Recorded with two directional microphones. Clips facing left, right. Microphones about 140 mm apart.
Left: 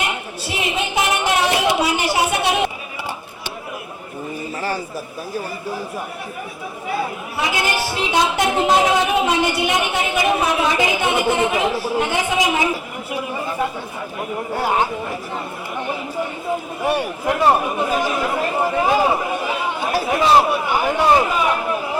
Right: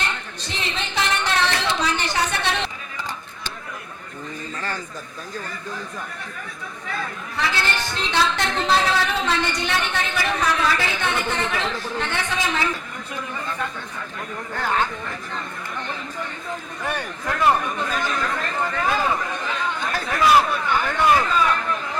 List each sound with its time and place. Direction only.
0.0 s a sound: 10° left (ahead or behind)
5.3 s a woman's voice: 10° left (ahead or behind)
6.8 s a woman's voice: 10° left (ahead or behind)
16.8 s a woman's voice: 10° left (ahead or behind)
19.2 s chatter: 10° left (ahead or behind)
20.1 s speech: 25° left (ahead or behind)
20.4 s a woman's voice: 10° left (ahead or behind)
21.0 s speech: 25° left (ahead or behind)
21.2 s a man's voice: 15° left (ahead or behind)